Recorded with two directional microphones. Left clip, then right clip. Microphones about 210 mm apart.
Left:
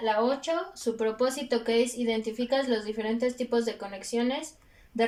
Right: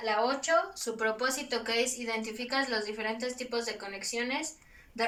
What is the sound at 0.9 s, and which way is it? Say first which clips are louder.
Speech: left 2 dB; 35° left (ahead or behind).